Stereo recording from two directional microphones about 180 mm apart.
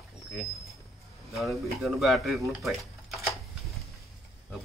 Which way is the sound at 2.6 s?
Centre (ahead or behind).